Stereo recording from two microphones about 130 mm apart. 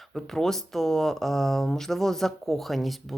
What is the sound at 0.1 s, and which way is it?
Speech, 5° left (ahead or behind).